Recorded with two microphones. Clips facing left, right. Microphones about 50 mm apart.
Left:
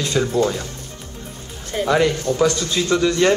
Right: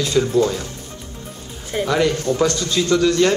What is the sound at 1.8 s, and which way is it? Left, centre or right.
Speech, centre.